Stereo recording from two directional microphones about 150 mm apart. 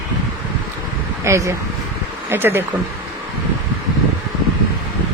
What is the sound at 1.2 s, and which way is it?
Speech, 20° right (ahead or behind).